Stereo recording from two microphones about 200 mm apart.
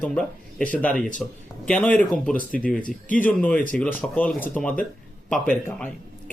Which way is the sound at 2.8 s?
40° left (ahead or behind).